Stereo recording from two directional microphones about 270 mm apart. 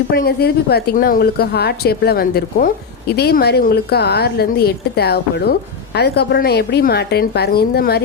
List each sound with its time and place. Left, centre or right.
0.1 s speech: left